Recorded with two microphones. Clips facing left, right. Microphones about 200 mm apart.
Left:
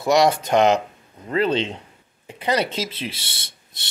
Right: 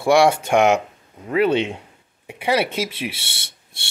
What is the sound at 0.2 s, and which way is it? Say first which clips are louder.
Speech: right 1 dB; 10° right (ahead or behind).